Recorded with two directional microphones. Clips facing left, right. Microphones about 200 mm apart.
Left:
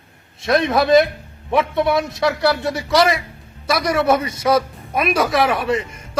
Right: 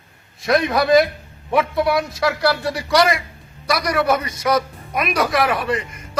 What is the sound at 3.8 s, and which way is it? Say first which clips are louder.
A man's voice: left 3 dB; 25° left (ahead or behind).